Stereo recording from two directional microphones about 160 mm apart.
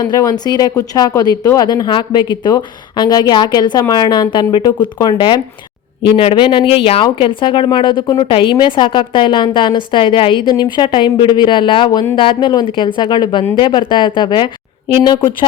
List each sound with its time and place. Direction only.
0.0 s a woman's voice: 25° left (ahead or behind)